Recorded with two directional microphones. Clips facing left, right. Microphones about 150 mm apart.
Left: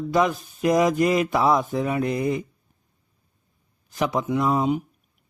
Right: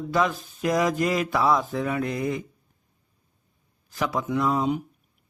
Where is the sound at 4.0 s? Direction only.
20° left (ahead or behind).